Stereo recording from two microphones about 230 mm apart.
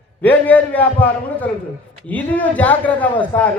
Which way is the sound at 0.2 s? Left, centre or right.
Centre.